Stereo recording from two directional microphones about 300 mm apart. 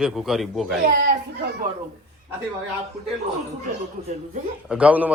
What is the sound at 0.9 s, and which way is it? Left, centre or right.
Children playing, right.